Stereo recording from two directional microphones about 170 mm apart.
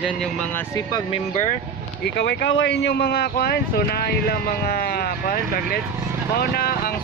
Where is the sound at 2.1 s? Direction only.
90° left.